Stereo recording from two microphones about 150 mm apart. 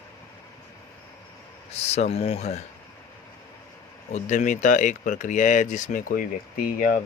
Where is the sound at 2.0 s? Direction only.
45° left (ahead or behind).